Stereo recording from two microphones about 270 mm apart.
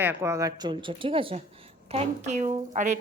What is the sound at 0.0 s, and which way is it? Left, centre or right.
A woman's voice, centre.